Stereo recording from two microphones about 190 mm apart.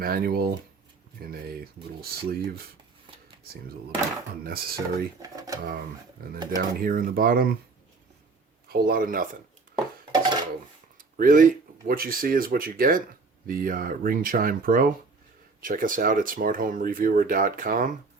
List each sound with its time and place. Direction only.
0.0 s speech: 50° right (ahead or behind)
4.4 s speech: 50° right (ahead or behind)
5.2 s speech: 20° right (ahead or behind)
6.2 s speech: 50° right (ahead or behind)
8.6 s speech: 55° right (ahead or behind)
10.1 s dishes: 25° right (ahead or behind)
10.9 s speech: 45° right (ahead or behind)